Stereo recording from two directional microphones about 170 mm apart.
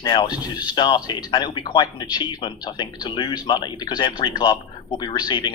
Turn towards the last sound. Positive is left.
turn(degrees=25)  # may be behind; listen again after turning